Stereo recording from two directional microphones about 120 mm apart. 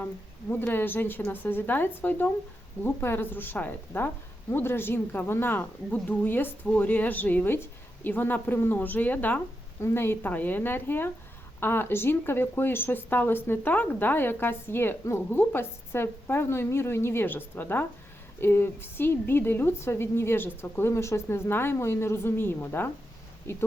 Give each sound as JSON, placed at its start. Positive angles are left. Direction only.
{"t": 0.6, "sound": "a woman's voice", "side_deg": 15}